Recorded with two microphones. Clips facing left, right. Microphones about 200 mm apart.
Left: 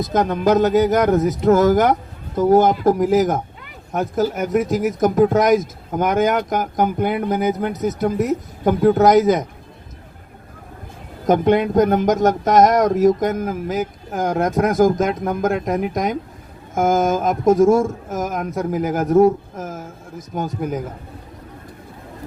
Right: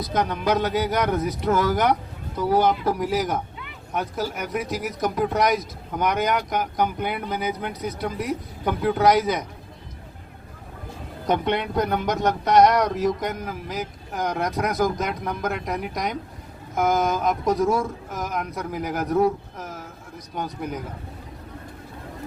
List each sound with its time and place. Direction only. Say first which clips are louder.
0.0 s speech: left 6 dB; 45° left (ahead or behind)
11.3 s speech: left 8 dB; 45° left (ahead or behind)